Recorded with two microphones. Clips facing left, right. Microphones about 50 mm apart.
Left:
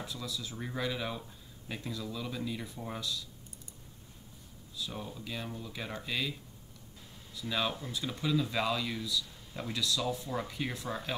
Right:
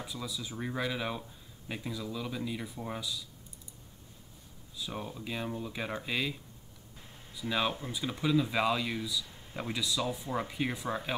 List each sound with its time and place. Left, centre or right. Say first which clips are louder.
0.0 s speech: right 1 dB; centre
4.7 s speech: right 2 dB; centre
7.3 s speech: right 2 dB; centre
9.8 s speech: left 1 dB; centre